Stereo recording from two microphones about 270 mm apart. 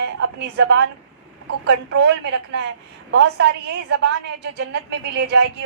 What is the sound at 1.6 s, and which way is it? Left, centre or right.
A woman's voice, right.